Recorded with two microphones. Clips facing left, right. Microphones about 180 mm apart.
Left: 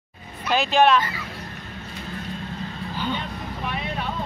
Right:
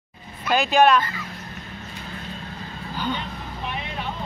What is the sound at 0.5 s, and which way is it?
Speech, centre (ahead or behind).